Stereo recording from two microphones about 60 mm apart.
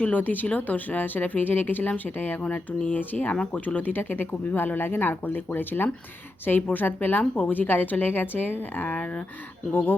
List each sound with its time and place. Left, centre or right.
0.0 s speech: left